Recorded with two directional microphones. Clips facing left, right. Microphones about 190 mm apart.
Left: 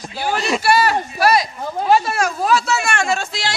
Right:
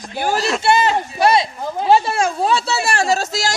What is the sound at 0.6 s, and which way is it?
Speech, 20° right (ahead or behind).